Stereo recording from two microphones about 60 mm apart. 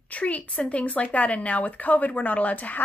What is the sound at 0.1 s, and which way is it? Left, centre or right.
Speech, left.